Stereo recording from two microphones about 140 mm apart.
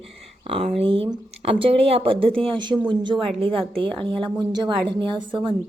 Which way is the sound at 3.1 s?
Centre (ahead or behind).